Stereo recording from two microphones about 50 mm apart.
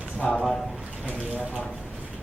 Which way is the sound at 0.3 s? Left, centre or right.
Centre.